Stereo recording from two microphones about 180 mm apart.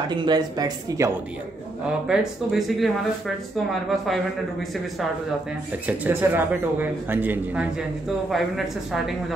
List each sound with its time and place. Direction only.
0.1 s speech: 25° right (ahead or behind)
2.0 s speech: centre (ahead or behind)
5.9 s a man's voice: 10° right (ahead or behind)